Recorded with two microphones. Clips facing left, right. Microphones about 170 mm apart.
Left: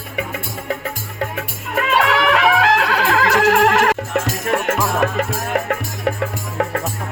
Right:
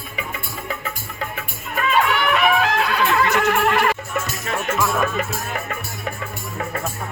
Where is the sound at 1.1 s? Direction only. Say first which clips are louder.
Left 5 dB; 75° left (ahead or behind).